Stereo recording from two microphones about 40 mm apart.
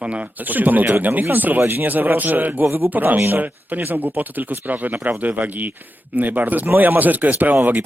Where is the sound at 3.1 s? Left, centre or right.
Right.